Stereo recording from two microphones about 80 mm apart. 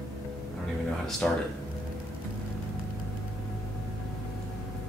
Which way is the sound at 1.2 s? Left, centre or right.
Centre.